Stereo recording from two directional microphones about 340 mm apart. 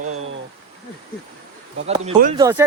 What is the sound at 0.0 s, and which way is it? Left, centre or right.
Vehicle, right.